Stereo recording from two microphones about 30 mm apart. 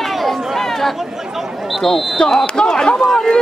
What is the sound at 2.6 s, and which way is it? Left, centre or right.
Chop, left.